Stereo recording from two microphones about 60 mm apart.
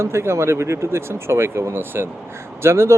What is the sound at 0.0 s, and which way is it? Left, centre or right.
Speech, right.